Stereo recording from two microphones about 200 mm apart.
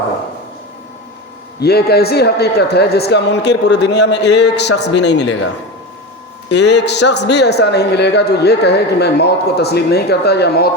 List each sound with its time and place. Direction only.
1.5 s a man's voice: 50° left (ahead or behind)
6.5 s a man's voice: 60° left (ahead or behind)